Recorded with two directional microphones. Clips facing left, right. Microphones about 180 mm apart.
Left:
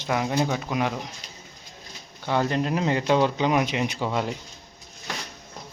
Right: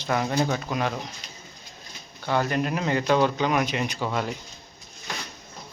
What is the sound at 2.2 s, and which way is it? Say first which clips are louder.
Speech: left 1 dB; 20° left (ahead or behind).